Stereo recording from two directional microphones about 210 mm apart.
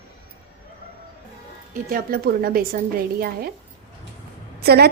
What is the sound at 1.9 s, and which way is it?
Speech, 45° right (ahead or behind).